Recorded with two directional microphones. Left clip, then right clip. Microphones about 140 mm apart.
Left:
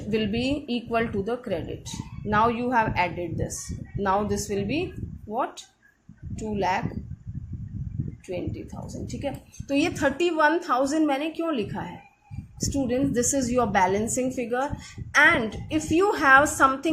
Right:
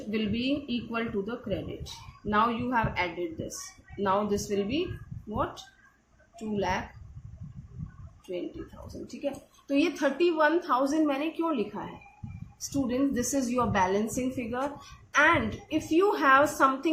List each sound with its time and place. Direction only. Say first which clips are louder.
0.1 s a woman's voice: left 5 dB; 45° left (ahead or behind)
6.6 s a woman's voice: left 5 dB; 40° left (ahead or behind)
9.2 s a woman's voice: left 1 dB; 50° left (ahead or behind)